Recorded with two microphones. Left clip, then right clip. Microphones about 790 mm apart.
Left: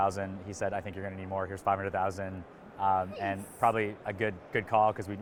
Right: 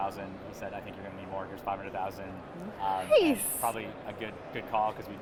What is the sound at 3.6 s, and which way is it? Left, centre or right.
Speech, left.